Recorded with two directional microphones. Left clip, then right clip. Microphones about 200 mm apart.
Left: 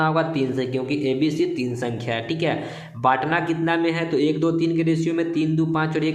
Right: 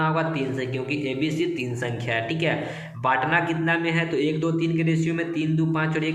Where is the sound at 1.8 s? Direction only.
45° left (ahead or behind).